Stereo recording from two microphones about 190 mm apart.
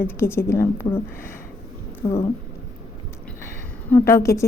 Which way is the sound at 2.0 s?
20° left (ahead or behind).